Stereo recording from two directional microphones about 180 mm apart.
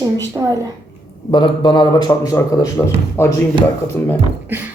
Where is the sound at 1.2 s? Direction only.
25° left (ahead or behind).